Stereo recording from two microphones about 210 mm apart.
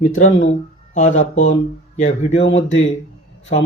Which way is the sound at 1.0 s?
35° left (ahead or behind).